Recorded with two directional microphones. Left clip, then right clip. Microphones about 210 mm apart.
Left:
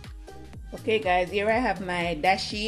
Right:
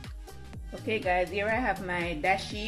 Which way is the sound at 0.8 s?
25° left (ahead or behind).